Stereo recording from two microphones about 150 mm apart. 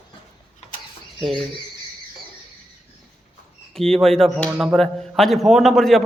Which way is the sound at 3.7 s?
5° left (ahead or behind).